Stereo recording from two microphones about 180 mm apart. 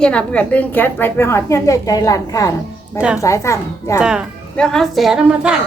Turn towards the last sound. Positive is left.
turn(degrees=-5)  # may be behind; listen again after turning